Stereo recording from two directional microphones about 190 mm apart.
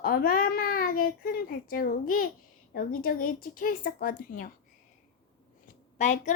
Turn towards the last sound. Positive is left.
turn(degrees=40)  # may be behind; listen again after turning